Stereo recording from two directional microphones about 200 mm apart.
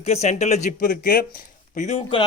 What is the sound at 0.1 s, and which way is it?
Speech, 35° left (ahead or behind).